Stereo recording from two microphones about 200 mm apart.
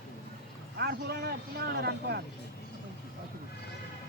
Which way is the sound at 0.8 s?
55° right (ahead or behind).